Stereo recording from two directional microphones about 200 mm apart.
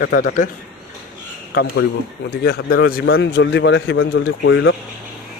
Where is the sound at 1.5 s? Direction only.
55° left (ahead or behind).